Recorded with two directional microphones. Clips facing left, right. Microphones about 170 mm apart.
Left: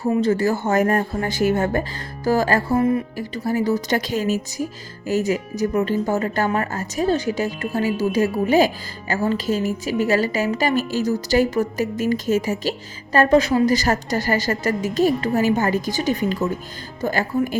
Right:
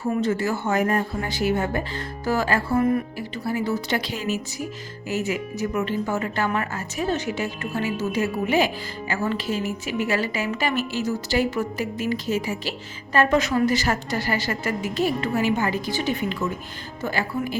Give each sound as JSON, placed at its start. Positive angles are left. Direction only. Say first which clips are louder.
{"t": 0.2, "sound": "a woman's voice", "louder": "left 4 dB", "side_deg": 35}
{"t": 13.1, "sound": "a woman's voice", "louder": "left 4 dB", "side_deg": 35}